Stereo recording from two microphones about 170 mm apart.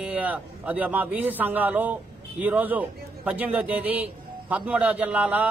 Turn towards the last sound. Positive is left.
turn(degrees=-10)  # may be behind; listen again after turning